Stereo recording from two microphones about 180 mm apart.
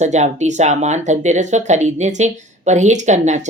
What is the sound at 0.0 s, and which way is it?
Speech, 40° right (ahead or behind).